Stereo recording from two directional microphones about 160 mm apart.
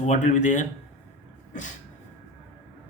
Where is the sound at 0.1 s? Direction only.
50° left (ahead or behind).